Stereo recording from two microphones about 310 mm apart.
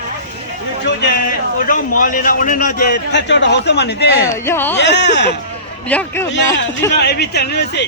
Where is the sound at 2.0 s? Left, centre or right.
Left.